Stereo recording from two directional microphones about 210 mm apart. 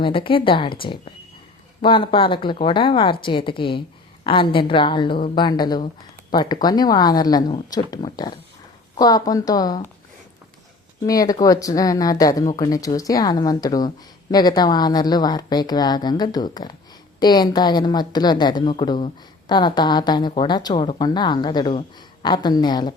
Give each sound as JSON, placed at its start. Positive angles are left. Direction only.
{"t": 0.0, "sound": "a woman's voice", "side_deg": 25}
{"t": 11.0, "sound": "a woman's voice", "side_deg": 15}